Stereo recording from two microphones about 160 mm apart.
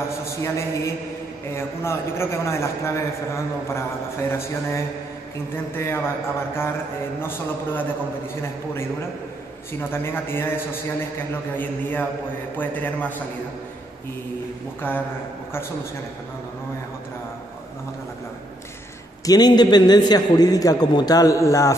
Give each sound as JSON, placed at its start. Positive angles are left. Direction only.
{"t": 0.4, "sound": "a man's voice", "side_deg": 15}
{"t": 4.3, "sound": "a man's voice", "side_deg": 15}
{"t": 7.2, "sound": "a man's voice", "side_deg": 15}
{"t": 9.7, "sound": "a man's voice", "side_deg": 15}
{"t": 14.8, "sound": "a man's voice", "side_deg": 10}
{"t": 19.2, "sound": "a man's voice", "side_deg": 25}